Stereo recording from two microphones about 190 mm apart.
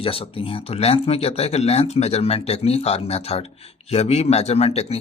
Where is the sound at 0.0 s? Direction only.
30° left (ahead or behind).